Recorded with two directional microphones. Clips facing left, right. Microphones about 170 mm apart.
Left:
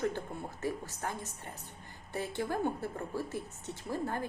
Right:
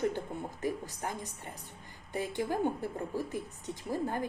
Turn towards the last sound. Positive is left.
turn(degrees=-15)  # may be behind; listen again after turning